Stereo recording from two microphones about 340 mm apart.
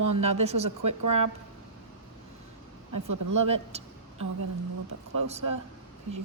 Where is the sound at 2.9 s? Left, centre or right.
Right.